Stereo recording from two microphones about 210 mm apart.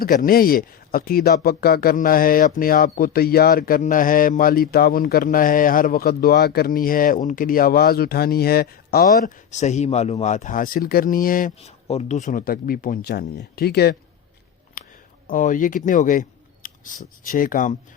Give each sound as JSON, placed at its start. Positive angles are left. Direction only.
{"t": 0.0, "sound": "speech", "side_deg": 40}
{"t": 14.8, "sound": "a sound", "side_deg": 40}
{"t": 15.3, "sound": "speech", "side_deg": 40}